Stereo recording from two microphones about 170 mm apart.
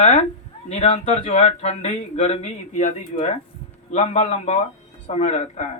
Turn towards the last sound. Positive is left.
turn(degrees=45)  # may be behind; listen again after turning